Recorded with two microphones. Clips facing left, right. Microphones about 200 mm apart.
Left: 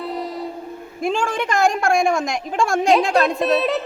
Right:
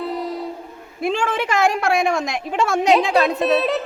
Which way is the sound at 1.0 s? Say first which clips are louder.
Even; 45° left (ahead or behind).